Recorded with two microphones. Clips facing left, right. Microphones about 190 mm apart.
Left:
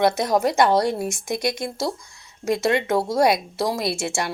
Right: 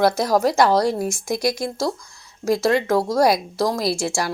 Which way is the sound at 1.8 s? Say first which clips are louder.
Right 2 dB; 25° left (ahead or behind).